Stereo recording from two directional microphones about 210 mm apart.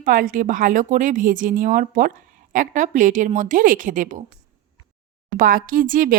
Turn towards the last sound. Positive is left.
turn(degrees=-40)  # may be behind; listen again after turning